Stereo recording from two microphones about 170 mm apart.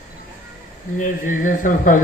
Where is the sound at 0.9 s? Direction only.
50° left (ahead or behind).